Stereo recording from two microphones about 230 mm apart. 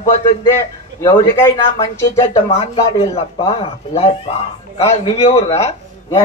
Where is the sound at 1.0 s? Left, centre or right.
Centre.